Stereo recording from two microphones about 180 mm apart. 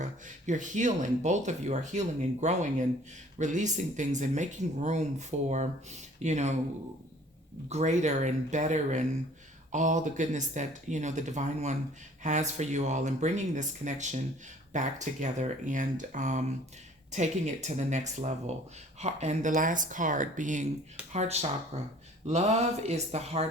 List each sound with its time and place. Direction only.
0.0 s speech: 45° right (ahead or behind)
7.7 s speech: 40° right (ahead or behind)